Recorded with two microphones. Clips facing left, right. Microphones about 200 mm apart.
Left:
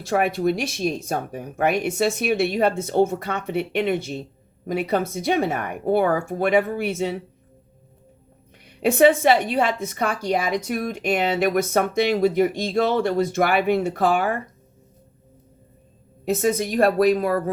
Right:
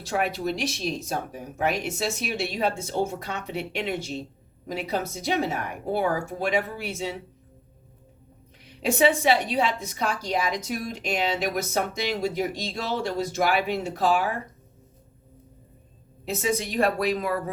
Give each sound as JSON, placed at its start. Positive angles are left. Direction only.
{"t": 0.0, "sound": "a woman's voice", "side_deg": 55}
{"t": 8.6, "sound": "a woman's voice", "side_deg": 55}
{"t": 16.2, "sound": "a woman's voice", "side_deg": 45}